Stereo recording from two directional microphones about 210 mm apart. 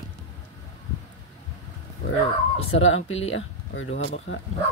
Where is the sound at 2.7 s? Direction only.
65° left (ahead or behind).